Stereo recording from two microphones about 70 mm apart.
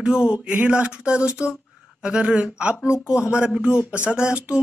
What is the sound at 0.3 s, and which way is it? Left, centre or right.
Speech, centre.